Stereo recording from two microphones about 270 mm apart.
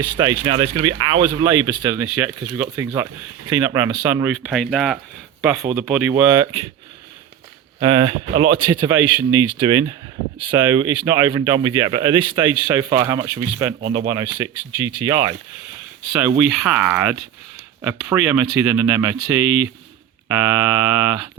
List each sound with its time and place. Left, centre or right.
0.0 s speech: centre
7.8 s speech: centre
16.4 s speech: centre